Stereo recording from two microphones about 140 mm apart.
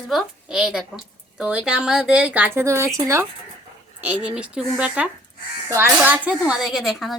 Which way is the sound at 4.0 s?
10° right (ahead or behind).